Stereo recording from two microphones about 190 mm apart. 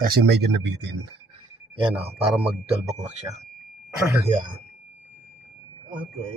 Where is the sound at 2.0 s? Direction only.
30° right (ahead or behind).